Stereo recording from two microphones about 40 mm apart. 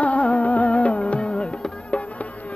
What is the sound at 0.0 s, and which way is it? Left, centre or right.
Music, left.